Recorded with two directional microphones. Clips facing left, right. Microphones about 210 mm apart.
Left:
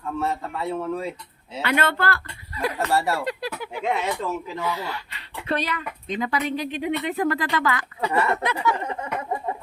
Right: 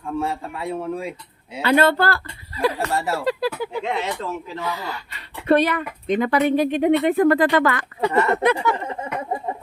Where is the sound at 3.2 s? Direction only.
30° right (ahead or behind).